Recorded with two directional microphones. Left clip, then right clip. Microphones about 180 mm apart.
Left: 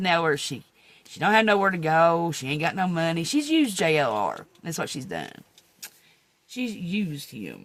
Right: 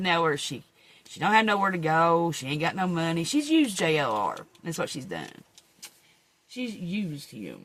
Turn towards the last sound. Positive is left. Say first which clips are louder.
# left 3 dB
turn(degrees=65)  # may be behind; listen again after turning